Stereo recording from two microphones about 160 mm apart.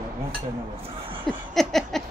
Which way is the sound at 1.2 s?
Centre (ahead or behind).